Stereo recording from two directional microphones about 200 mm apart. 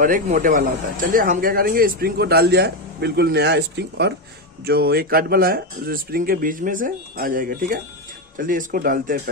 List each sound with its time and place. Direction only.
0.0 s speech: 45° right (ahead or behind)